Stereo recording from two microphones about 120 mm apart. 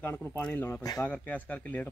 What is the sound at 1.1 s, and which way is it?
Speech, 15° left (ahead or behind).